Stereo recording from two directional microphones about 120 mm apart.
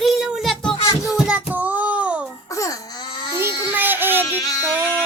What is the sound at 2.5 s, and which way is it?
Baby cry, 25° left (ahead or behind).